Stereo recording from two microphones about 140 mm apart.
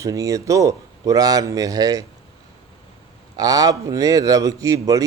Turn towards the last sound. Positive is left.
turn(degrees=-25)  # may be behind; listen again after turning